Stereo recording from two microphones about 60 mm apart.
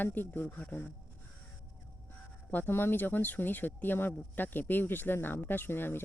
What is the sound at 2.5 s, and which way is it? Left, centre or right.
Speech, left.